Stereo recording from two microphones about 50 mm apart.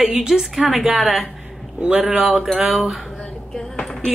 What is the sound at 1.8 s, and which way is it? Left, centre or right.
Speech, centre.